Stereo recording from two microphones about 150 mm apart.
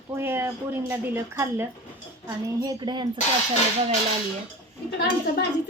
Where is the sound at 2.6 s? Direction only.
25° right (ahead or behind).